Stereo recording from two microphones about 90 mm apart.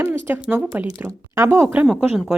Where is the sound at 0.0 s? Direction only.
25° right (ahead or behind).